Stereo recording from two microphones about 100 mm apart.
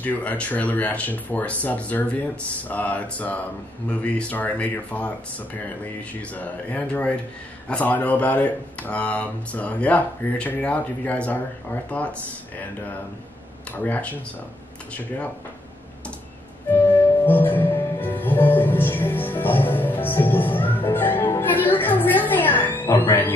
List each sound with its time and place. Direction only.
0.0 s speech: 15° left (ahead or behind)
6.2 s speech: 15° left (ahead or behind)
16.7 s music: 20° left (ahead or behind)